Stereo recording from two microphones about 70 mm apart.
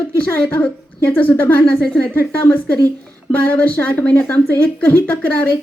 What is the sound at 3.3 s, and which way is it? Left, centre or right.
A woman's voice, left.